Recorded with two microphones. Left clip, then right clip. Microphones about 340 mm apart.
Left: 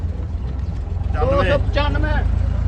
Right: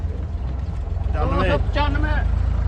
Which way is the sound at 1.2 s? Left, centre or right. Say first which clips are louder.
Left 5 dB; left.